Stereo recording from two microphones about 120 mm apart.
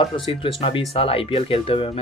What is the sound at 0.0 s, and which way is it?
Speech, 45° left (ahead or behind).